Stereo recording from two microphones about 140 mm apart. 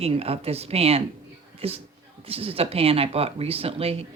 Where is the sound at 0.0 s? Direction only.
45° right (ahead or behind).